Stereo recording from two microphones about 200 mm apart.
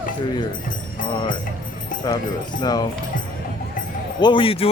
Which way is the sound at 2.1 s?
20° left (ahead or behind).